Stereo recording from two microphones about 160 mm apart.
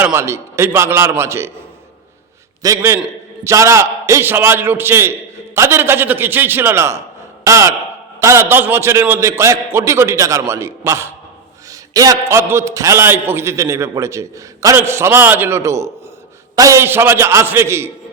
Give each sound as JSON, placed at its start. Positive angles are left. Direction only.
{"t": 0.0, "sound": "a man's voice", "side_deg": -15}
{"t": 2.6, "sound": "a man's voice", "side_deg": -20}